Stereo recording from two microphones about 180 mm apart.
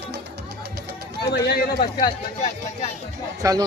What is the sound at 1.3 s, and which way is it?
Speech, 65° left (ahead or behind).